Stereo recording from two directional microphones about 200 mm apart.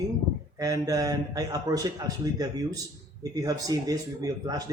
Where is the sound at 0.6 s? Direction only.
15° right (ahead or behind).